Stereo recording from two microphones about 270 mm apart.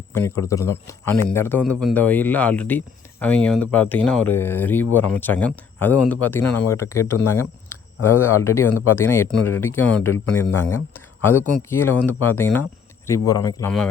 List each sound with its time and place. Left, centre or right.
0.1 s speech: centre
8.7 s speech: left
9.0 s speech: centre
10.9 s a sound: centre
11.7 s speech: centre